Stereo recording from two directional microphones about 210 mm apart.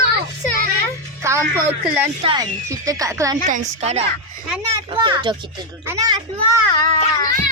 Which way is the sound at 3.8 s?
30° right (ahead or behind).